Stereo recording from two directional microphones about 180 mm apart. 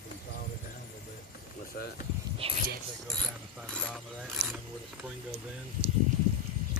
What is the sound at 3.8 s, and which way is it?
Speech, 5° left (ahead or behind).